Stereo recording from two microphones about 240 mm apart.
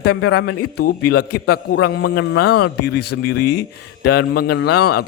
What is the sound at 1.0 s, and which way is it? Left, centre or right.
Music, left.